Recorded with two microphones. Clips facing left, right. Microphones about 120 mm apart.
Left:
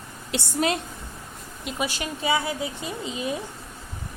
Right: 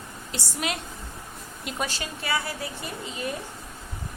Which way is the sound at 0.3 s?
65° left (ahead or behind).